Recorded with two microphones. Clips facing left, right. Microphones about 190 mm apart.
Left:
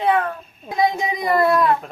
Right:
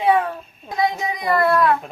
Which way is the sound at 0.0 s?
10° right (ahead or behind).